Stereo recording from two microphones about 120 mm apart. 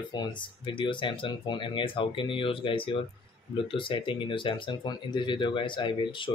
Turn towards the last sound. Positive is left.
turn(degrees=40)  # may be behind; listen again after turning